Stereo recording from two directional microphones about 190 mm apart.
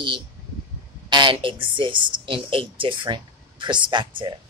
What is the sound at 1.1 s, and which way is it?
A woman's voice, 25° right (ahead or behind).